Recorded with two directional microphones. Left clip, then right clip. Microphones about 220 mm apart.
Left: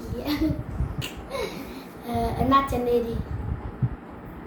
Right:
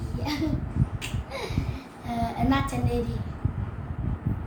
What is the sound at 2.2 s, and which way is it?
Speech, 15° right (ahead or behind).